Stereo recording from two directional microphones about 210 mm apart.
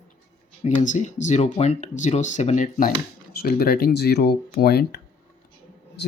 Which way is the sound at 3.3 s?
50° left (ahead or behind).